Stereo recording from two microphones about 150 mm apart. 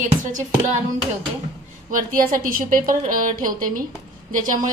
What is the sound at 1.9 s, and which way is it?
A woman's voice, 70° right (ahead or behind).